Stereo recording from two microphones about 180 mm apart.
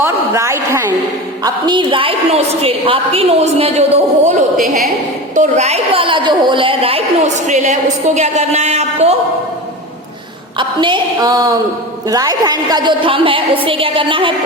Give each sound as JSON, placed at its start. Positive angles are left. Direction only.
{"t": 0.0, "sound": "a woman's voice", "side_deg": -15}
{"t": 1.5, "sound": "a woman's voice", "side_deg": -25}
{"t": 5.3, "sound": "a woman's voice", "side_deg": -40}
{"t": 10.6, "sound": "a woman's voice", "side_deg": -25}